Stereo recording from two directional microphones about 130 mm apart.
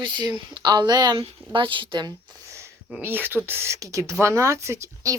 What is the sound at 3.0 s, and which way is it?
Speech, 15° right (ahead or behind).